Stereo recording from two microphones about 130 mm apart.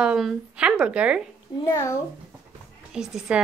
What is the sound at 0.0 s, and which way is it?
Speech, 5° right (ahead or behind).